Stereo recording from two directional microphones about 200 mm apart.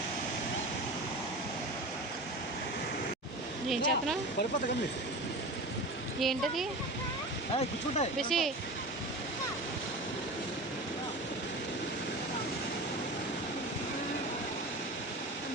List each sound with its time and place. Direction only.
3.7 s speech: centre (ahead or behind)
6.1 s speech: centre (ahead or behind)
7.5 s speech: 35° left (ahead or behind)
8.3 s speech: centre (ahead or behind)